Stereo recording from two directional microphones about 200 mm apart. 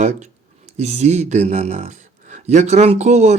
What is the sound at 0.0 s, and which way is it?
Speech, 35° right (ahead or behind).